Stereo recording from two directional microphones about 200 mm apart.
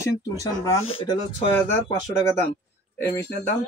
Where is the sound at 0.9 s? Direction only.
25° left (ahead or behind).